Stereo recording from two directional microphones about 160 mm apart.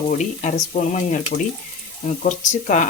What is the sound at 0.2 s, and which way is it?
Speech, 50° left (ahead or behind).